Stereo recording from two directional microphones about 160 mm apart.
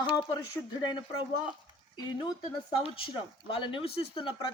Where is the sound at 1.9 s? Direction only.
25° left (ahead or behind).